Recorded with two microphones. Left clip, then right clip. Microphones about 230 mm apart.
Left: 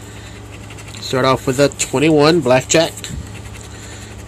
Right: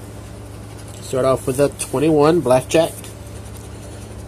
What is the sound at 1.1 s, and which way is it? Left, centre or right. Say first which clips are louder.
Speech: left 2 dB; centre.